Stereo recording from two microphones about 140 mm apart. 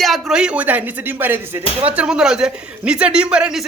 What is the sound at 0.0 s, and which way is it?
Speech, centre (ahead or behind).